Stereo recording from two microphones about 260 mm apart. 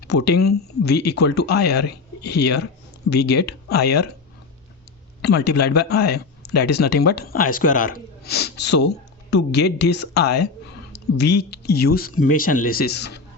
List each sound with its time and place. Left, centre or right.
0.3 s speech: left
0.8 s speech: left
5.2 s speech: left